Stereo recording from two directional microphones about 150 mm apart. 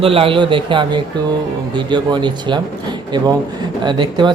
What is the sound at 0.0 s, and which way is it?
A man's voice, 40° right (ahead or behind).